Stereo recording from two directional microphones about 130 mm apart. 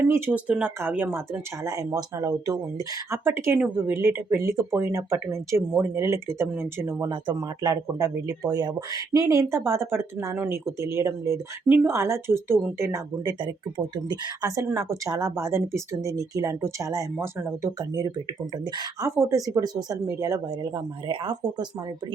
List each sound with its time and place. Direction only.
0.1 s speech: 10° right (ahead or behind)
7.1 s speech: 35° right (ahead or behind)
13.4 s speech: 35° right (ahead or behind)